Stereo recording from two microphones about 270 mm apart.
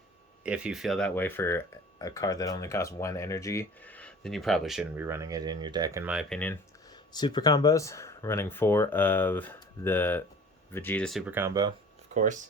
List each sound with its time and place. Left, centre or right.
0.4 s speech: centre
12.1 s speech: right